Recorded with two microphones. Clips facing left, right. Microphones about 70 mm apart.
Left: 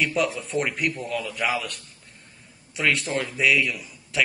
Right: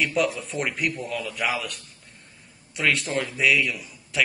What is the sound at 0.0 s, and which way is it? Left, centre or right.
A man's voice, centre.